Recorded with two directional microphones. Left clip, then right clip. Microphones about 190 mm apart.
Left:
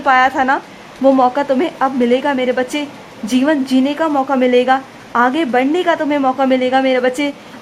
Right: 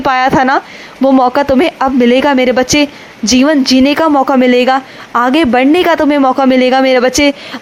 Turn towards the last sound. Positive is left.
turn(degrees=-35)  # may be behind; listen again after turning